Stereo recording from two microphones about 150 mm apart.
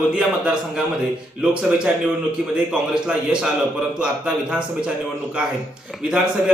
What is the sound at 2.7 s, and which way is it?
A man's voice, 5° right (ahead or behind).